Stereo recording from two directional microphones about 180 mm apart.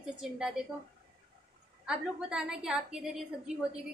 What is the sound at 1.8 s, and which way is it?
A woman's voice, 5° right (ahead or behind).